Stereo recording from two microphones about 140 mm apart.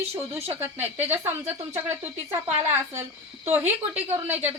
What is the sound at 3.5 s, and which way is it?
Speech, 15° right (ahead or behind).